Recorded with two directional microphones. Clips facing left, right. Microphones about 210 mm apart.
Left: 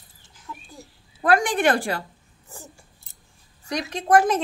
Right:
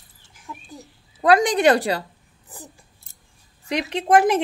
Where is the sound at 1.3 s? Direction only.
20° right (ahead or behind).